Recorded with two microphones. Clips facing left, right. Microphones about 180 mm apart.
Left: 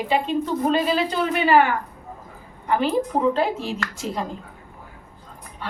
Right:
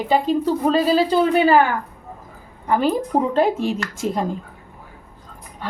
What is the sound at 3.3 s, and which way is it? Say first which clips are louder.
Speech: right 5 dB; 45° right (ahead or behind).